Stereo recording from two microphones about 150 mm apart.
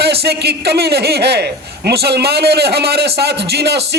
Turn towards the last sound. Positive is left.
turn(degrees=-90)